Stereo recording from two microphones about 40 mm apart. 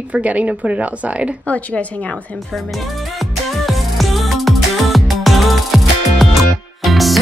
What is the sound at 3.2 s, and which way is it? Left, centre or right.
Music, centre.